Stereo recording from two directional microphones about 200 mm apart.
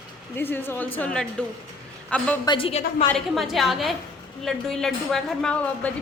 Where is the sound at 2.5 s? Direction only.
30° left (ahead or behind).